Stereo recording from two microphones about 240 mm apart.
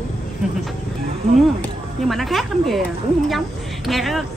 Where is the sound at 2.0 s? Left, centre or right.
Centre.